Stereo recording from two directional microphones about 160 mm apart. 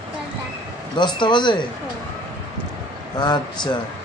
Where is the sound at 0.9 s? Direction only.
30° left (ahead or behind).